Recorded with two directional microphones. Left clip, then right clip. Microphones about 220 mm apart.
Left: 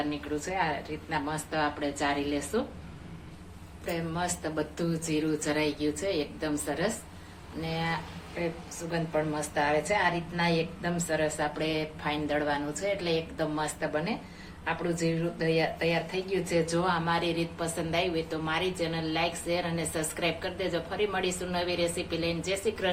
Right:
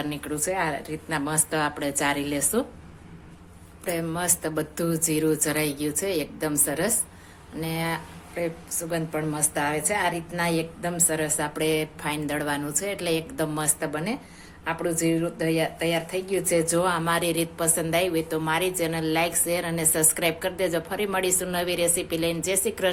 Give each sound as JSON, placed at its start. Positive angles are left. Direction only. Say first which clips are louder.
{"t": 0.1, "sound": "a woman's voice", "louder": "right 4 dB", "side_deg": -55}
{"t": 3.9, "sound": "speech", "louder": "right 4 dB", "side_deg": -50}